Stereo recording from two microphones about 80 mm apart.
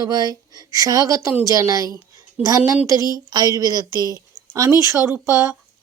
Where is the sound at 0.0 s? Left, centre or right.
Right.